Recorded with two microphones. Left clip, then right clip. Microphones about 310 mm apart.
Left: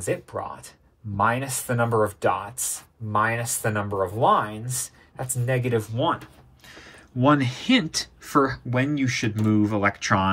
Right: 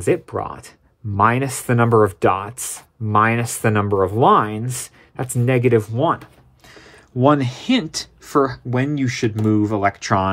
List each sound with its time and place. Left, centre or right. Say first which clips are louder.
0.0 s speech: right 8 dB; right